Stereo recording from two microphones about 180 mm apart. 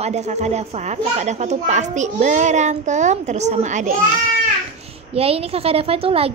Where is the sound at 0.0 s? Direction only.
40° right (ahead or behind).